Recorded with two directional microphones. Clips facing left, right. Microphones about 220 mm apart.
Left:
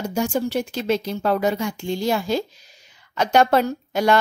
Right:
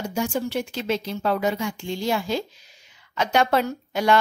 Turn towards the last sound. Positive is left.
turn(degrees=40)  # may be behind; listen again after turning